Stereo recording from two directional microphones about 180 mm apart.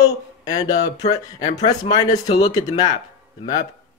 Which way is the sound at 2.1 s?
20° left (ahead or behind).